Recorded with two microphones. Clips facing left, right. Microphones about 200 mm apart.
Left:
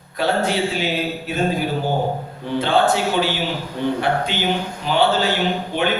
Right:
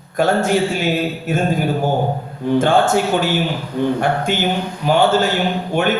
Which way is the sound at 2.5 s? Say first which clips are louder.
Right 3 dB; 45° right (ahead or behind).